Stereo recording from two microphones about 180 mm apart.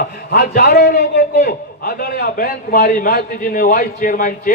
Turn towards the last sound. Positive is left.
turn(degrees=45)  # may be behind; listen again after turning